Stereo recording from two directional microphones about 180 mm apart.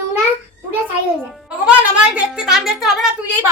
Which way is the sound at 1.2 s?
5° right (ahead or behind).